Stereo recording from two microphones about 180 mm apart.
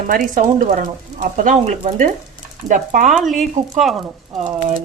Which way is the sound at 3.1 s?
Centre (ahead or behind).